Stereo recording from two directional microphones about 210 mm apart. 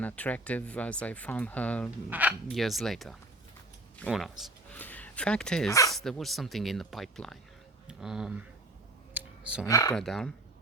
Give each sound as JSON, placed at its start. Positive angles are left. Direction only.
{"t": 0.0, "sound": "speech", "side_deg": 5}
{"t": 2.0, "sound": "speech", "side_deg": -5}
{"t": 9.1, "sound": "clicking", "side_deg": -5}
{"t": 9.6, "sound": "speech", "side_deg": 15}
{"t": 9.9, "sound": "speech", "side_deg": 0}